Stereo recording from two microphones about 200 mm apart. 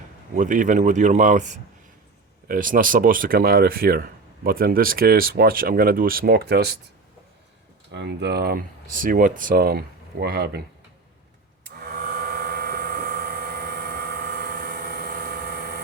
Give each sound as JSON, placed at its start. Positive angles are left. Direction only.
{"t": 0.3, "sound": "speech", "side_deg": -40}
{"t": 7.9, "sound": "speech", "side_deg": -60}
{"t": 11.7, "sound": "a sound", "side_deg": -50}